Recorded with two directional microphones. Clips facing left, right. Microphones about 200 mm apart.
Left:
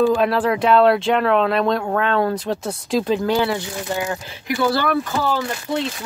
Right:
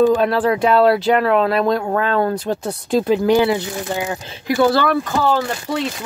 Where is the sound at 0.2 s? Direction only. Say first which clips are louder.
Right 2 dB; centre (ahead or behind).